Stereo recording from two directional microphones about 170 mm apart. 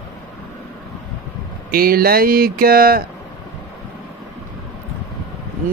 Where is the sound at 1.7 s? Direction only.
60° right (ahead or behind).